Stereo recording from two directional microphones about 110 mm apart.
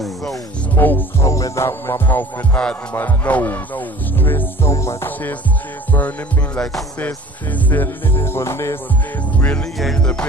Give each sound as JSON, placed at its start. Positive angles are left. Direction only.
{"t": 0.0, "sound": "speech", "side_deg": 0}
{"t": 0.7, "sound": "music", "side_deg": 15}
{"t": 9.9, "sound": "music", "side_deg": 10}